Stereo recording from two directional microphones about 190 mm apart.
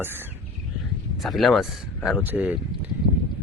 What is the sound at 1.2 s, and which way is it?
Speech, centre (ahead or behind).